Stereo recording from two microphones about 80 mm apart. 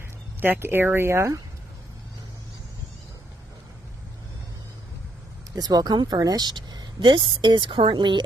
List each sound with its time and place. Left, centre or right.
0.4 s speech: right
5.6 s speech: right